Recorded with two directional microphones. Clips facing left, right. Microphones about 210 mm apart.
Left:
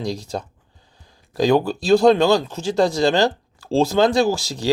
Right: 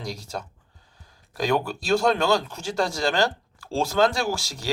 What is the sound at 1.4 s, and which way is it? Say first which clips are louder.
Speech: left 7 dB; 30° left (ahead or behind).